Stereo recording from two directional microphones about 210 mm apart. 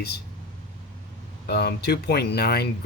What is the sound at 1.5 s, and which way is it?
Speech, 50° left (ahead or behind).